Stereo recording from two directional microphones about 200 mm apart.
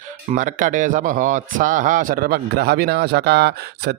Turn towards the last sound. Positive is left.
turn(degrees=-55)  # may be behind; listen again after turning